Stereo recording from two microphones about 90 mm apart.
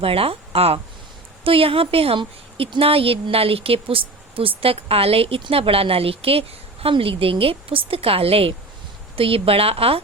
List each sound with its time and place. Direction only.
0.0 s a woman's voice: 90° right